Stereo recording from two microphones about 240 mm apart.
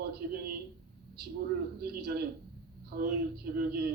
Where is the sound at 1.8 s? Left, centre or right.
Right.